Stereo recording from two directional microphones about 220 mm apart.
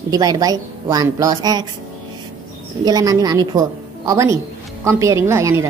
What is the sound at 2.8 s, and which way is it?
A woman's voice, 15° right (ahead or behind).